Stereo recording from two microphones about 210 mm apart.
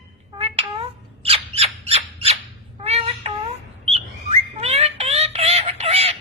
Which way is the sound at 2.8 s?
30° right (ahead or behind).